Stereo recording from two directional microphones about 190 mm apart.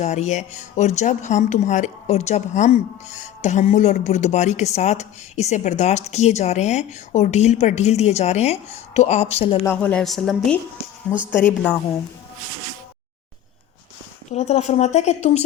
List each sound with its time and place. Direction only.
0.0 s speech: 35° left (ahead or behind)
9.6 s a woman's voice: 5° left (ahead or behind)
14.3 s speech: 35° left (ahead or behind)